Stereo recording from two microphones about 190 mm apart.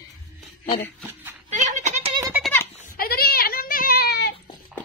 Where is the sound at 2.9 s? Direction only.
50° left (ahead or behind).